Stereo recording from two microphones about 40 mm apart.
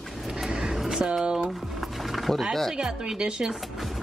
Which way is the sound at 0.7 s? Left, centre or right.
Centre.